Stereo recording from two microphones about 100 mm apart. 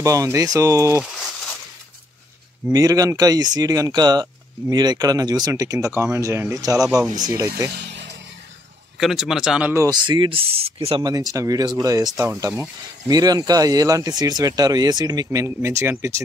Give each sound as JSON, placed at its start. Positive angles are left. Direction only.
{"t": 0.0, "sound": "speech", "side_deg": -35}
{"t": 1.0, "sound": "a sound", "side_deg": 0}
{"t": 2.7, "sound": "speech", "side_deg": -35}
{"t": 8.9, "sound": "speech", "side_deg": -5}
{"t": 9.8, "sound": "speech", "side_deg": -50}
{"t": 10.4, "sound": "speech", "side_deg": -75}
{"t": 11.0, "sound": "speech", "side_deg": -40}